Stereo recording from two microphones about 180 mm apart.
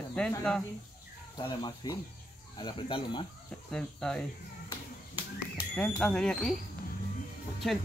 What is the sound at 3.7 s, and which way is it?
Speech, 5° left (ahead or behind).